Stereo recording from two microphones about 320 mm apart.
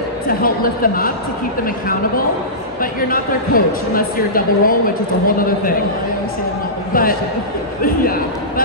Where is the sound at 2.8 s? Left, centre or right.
Left.